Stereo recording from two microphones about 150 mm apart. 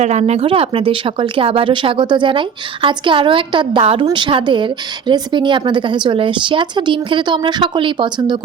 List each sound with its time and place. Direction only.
0.0 s speech: 50° right (ahead or behind); by 8.4 s 35° right (ahead or behind)